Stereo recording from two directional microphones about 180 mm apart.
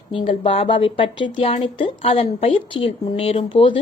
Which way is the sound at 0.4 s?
30° left (ahead or behind).